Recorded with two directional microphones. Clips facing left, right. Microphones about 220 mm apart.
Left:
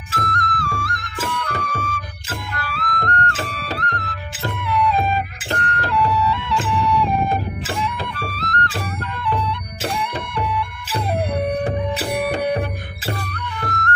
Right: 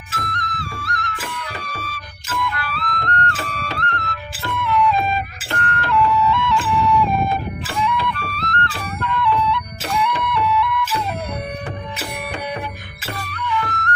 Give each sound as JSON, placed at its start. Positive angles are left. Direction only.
{"t": 0.2, "sound": "music", "side_deg": 45}
{"t": 7.8, "sound": "music", "side_deg": 40}
{"t": 13.4, "sound": "music", "side_deg": 50}